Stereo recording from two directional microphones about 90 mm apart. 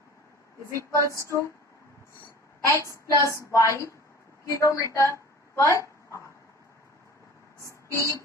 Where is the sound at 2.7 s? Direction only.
35° left (ahead or behind).